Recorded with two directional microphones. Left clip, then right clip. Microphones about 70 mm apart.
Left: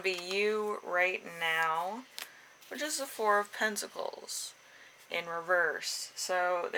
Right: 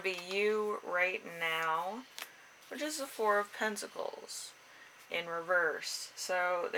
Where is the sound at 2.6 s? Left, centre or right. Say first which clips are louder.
Left 2 dB; left.